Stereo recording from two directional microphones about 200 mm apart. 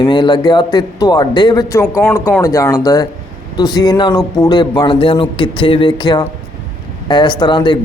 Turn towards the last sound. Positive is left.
turn(degrees=20)  # may be behind; listen again after turning